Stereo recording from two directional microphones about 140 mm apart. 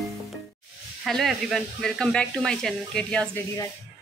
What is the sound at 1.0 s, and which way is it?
Speech, centre (ahead or behind).